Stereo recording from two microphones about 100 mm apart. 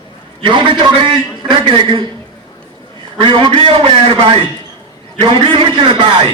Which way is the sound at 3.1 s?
55° right (ahead or behind).